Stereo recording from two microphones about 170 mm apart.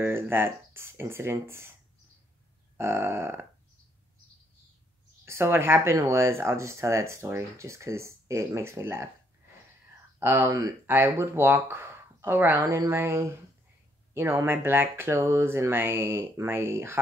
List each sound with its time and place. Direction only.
0.0 s speech: 15° right (ahead or behind)
2.8 s speech: 15° right (ahead or behind)
5.2 s speech: 15° right (ahead or behind)
10.1 s speech: 15° right (ahead or behind)